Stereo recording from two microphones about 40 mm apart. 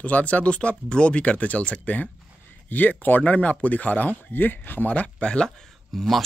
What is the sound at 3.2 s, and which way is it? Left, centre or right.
Speech, left.